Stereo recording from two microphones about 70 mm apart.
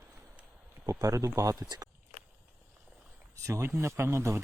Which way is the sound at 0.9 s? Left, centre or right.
Right.